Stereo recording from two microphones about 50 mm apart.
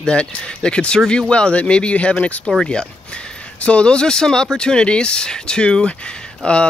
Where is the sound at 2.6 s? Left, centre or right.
Centre.